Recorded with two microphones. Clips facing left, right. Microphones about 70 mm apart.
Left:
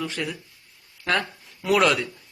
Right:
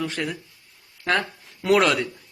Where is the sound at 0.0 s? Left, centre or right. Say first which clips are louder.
Right 2 dB; right.